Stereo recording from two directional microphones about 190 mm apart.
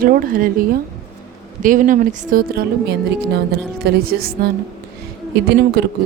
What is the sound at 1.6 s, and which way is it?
Speech, 45° right (ahead or behind).